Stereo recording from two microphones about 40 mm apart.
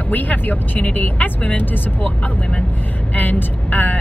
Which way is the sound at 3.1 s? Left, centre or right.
Left.